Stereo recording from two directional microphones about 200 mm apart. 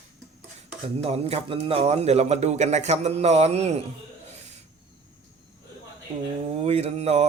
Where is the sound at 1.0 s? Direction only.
30° right (ahead or behind).